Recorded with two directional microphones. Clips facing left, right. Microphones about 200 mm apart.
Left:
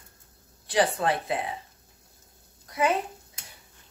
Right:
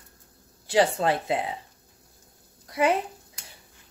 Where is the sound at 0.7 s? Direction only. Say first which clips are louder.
Right 2 dB; 25° right (ahead or behind).